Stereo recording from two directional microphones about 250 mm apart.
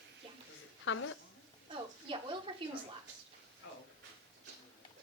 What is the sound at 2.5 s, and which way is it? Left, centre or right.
Speech, centre.